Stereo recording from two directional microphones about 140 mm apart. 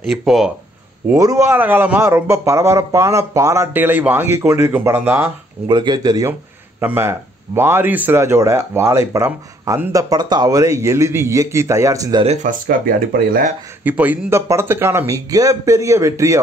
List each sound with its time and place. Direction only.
0.1 s speech: centre (ahead or behind)
1.1 s a man's voice: 20° right (ahead or behind)
5.7 s speech: 30° right (ahead or behind)
6.8 s speech: 15° right (ahead or behind)
12.3 s speech: 80° right
13.8 s speech: 10° right (ahead or behind)